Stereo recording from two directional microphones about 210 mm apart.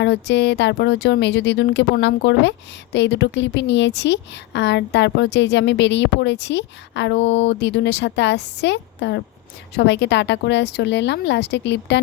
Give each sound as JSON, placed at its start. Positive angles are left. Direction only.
{"t": 0.0, "sound": "a woman's voice", "side_deg": 55}